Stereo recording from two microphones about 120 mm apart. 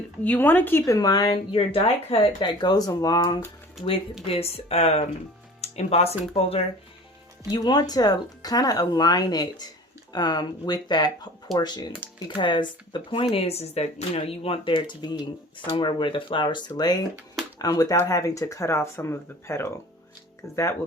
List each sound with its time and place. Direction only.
0.3 s speech: 15° left (ahead or behind); by 2.3 s 55° left (ahead or behind)
2.4 s speech: 35° left (ahead or behind)
4.3 s speech: 55° left (ahead or behind)
7.5 s speech: 35° left (ahead or behind)